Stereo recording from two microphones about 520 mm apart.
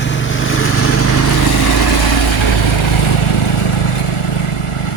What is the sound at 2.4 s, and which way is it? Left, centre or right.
Vehicle, left.